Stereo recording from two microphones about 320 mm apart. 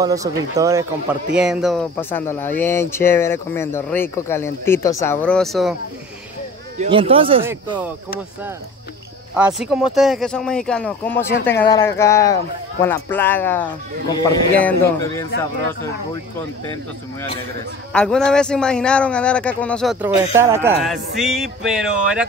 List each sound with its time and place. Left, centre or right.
0.0 s speech: centre
6.8 s speech: centre
9.3 s a man's voice: centre
17.9 s a man's voice: centre